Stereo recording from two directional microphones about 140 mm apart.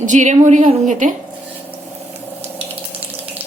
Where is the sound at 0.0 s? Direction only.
60° right (ahead or behind).